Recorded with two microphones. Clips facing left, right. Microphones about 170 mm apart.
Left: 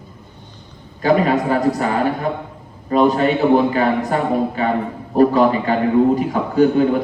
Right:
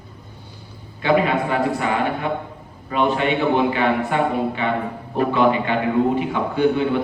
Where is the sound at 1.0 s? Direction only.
40° left (ahead or behind).